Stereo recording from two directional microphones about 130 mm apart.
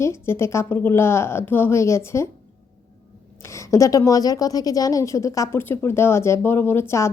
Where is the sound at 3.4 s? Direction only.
25° left (ahead or behind).